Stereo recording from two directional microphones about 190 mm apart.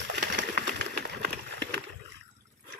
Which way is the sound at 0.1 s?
60° right (ahead or behind).